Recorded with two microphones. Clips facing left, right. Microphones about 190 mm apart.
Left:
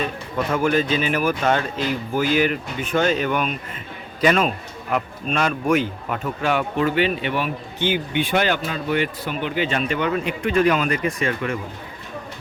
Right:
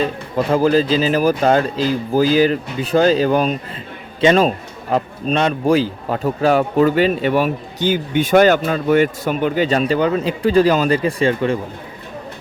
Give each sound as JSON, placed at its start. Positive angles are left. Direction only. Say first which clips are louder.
{"t": 0.0, "sound": "a man's voice", "louder": "right 5 dB", "side_deg": -35}